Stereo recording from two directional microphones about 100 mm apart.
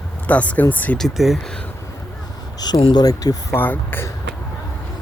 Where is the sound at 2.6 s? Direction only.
45° left (ahead or behind).